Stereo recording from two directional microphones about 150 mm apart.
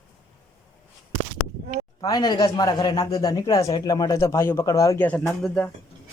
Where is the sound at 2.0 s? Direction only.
25° left (ahead or behind); by 5.7 s 10° left (ahead or behind).